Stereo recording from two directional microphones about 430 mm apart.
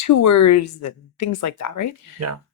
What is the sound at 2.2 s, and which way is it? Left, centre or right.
Speech, right.